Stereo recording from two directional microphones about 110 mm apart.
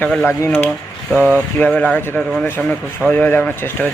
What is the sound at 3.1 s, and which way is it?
Speech, 15° left (ahead or behind).